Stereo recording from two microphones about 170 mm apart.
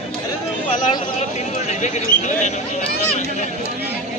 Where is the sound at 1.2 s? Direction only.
40° left (ahead or behind).